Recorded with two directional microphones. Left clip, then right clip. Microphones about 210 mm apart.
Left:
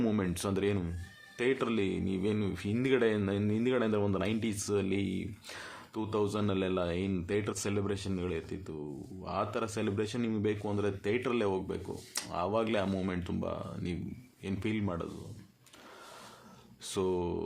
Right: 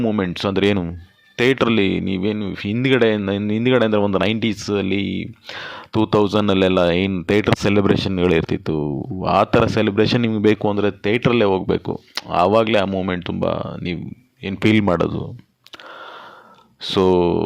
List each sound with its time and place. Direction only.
0.0 s speech: 30° right (ahead or behind); by 15.1 s 45° right (ahead or behind)
16.8 s speech: 40° right (ahead or behind)